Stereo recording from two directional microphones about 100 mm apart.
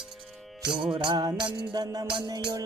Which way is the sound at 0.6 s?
10° right (ahead or behind).